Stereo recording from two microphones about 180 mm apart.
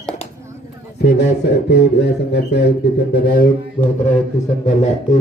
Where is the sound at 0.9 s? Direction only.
65° left (ahead or behind).